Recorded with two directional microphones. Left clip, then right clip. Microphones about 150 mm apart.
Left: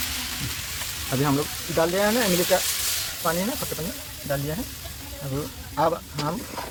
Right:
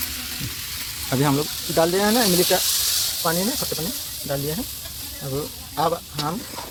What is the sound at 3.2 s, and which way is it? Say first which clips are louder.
Speech: right 1 dB; 60° right (ahead or behind).